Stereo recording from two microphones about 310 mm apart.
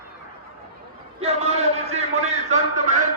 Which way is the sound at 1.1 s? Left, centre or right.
Centre.